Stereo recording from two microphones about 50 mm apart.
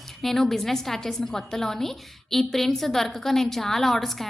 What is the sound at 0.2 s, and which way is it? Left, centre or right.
A woman's voice, centre.